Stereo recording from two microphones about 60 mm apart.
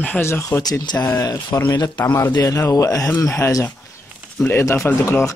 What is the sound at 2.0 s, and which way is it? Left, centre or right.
Speech, left.